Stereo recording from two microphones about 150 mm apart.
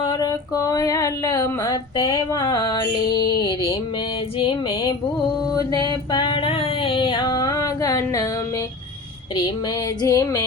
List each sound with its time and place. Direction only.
0.0 s female singing: 25° left (ahead or behind)
4.4 s a sound: 30° left (ahead or behind)
5.5 s female singing: 25° left (ahead or behind)
10.0 s female singing: 25° left (ahead or behind)